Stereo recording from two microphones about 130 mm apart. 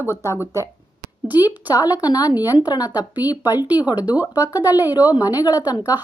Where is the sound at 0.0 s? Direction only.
20° right (ahead or behind).